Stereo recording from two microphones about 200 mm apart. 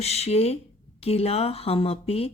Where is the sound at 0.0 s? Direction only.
30° left (ahead or behind).